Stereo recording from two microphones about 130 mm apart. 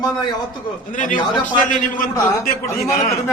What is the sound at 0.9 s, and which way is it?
Speech, 90° left.